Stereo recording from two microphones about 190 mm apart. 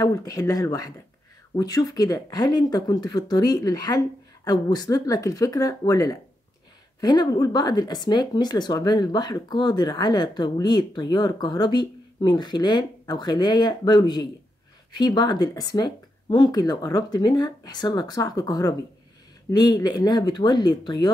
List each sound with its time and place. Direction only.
0.0 s speech: 20° left (ahead or behind)